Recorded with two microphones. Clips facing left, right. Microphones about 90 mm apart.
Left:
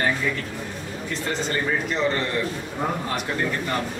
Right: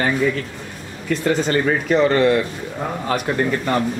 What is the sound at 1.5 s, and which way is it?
Speech, 80° right.